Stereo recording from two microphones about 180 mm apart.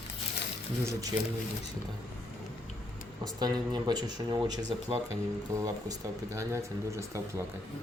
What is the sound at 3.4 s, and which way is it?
Speech, 25° right (ahead or behind).